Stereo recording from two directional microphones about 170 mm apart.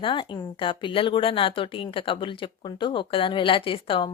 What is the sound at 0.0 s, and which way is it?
A woman's voice, 30° left (ahead or behind).